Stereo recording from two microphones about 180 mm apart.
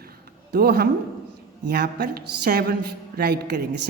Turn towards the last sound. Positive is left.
turn(degrees=-65)  # may be behind; listen again after turning